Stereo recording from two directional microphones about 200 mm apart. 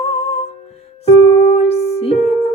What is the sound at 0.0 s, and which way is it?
Music, 30° left (ahead or behind).